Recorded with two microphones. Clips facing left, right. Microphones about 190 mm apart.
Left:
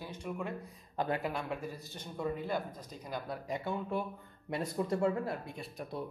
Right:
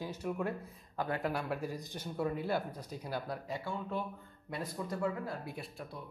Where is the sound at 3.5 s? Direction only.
15° left (ahead or behind).